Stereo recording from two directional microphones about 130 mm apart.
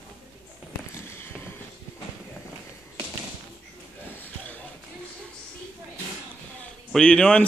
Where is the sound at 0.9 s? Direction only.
20° left (ahead or behind).